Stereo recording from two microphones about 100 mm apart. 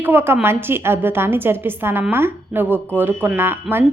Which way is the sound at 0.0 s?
20° right (ahead or behind).